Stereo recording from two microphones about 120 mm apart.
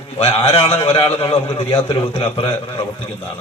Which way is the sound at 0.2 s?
50° left (ahead or behind).